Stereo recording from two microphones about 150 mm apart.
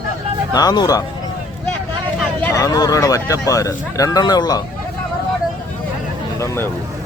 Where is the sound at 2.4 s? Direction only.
20° left (ahead or behind).